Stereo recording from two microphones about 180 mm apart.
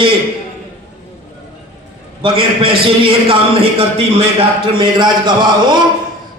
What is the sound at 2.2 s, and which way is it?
A man's voice, 30° right (ahead or behind).